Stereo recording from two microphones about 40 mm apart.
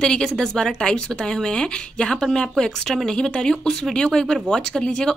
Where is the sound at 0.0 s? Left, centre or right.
Centre.